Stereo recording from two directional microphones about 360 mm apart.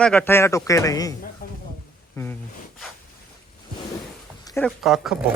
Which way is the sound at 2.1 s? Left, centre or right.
Centre.